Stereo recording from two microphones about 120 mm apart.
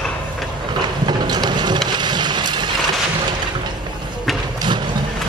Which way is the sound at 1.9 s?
40° right (ahead or behind).